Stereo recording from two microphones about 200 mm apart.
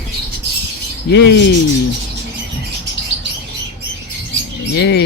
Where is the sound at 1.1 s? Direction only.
60° left (ahead or behind).